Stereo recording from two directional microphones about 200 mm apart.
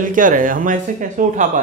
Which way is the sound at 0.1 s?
40° right (ahead or behind).